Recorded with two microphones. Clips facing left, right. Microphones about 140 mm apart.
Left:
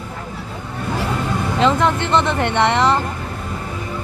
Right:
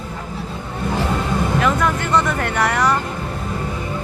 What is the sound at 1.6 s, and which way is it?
Speech, 25° left (ahead or behind).